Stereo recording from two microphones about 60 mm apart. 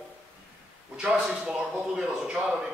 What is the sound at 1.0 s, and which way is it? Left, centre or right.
A man's voice, centre.